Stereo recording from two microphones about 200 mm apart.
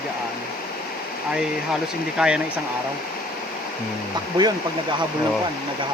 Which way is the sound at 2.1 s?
5° right (ahead or behind).